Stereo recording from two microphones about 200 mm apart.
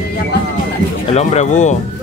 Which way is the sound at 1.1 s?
35° left (ahead or behind).